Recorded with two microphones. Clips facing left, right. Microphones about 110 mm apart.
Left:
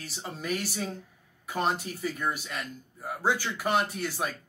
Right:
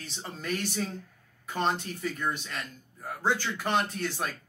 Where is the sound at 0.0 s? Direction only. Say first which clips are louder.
Left 1 dB; 5° left (ahead or behind).